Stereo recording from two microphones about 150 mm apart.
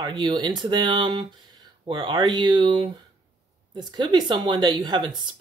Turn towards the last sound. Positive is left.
turn(degrees=-30)  # may be behind; listen again after turning